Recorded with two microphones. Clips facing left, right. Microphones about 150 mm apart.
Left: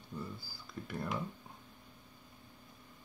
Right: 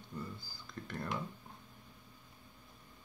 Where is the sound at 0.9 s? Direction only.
5° left (ahead or behind).